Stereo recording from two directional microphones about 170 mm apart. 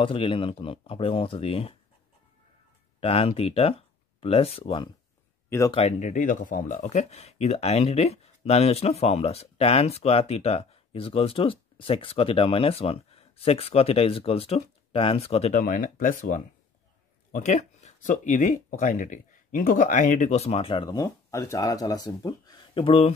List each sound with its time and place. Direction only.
0.0 s speech: 30° left (ahead or behind)
3.0 s speech: 35° left (ahead or behind)
15.6 s speech: 55° left (ahead or behind); by 23.1 s 30° left (ahead or behind)